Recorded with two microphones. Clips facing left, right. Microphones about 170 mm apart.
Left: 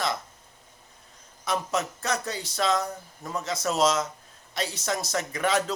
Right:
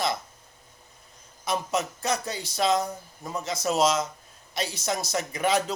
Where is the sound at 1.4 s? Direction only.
15° right (ahead or behind).